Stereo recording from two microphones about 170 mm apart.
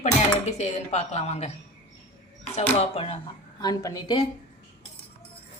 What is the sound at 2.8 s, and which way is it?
Speech, 35° left (ahead or behind).